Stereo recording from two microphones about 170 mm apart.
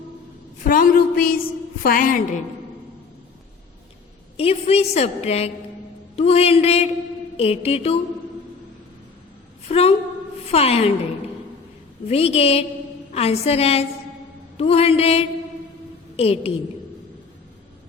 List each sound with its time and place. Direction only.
0.6 s a sound: 55° left (ahead or behind)
1.8 s a woman's voice: 55° left (ahead or behind)
4.4 s a woman's voice: 35° left (ahead or behind)
9.6 s a woman's voice: 35° left (ahead or behind)
12.0 s a woman's voice: 35° left (ahead or behind)